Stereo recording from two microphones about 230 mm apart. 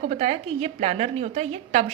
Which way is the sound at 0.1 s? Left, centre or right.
Right.